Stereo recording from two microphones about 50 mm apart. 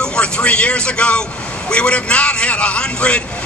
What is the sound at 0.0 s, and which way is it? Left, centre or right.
Speech, centre.